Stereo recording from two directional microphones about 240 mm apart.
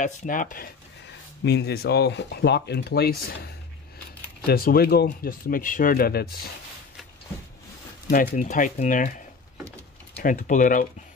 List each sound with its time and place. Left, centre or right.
0.0 s speech: left
8.1 s speech: left
10.2 s speech: left